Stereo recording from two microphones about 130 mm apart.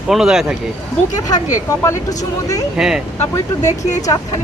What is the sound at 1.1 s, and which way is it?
Speech, 30° left (ahead or behind).